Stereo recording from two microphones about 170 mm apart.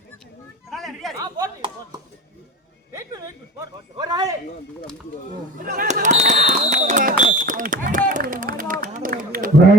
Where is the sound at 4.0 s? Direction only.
20° right (ahead or behind).